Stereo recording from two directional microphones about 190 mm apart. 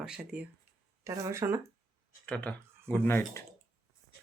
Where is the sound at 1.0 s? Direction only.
15° right (ahead or behind).